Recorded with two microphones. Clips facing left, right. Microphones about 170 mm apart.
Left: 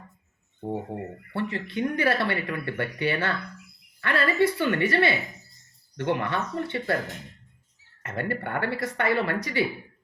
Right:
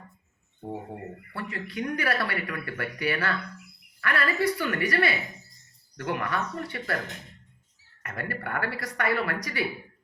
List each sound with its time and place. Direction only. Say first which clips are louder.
0.9 s speech: left 5 dB; 25° left (ahead or behind)
8.0 s speech: left 5 dB; 25° left (ahead or behind)